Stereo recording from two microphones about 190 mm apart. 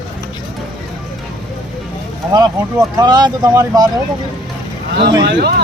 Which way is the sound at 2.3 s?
20° right (ahead or behind).